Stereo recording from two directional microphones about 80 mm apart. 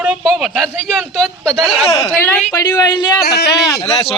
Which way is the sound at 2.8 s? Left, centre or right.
Left.